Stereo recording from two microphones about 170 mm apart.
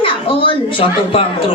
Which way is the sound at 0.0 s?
30° left (ahead or behind).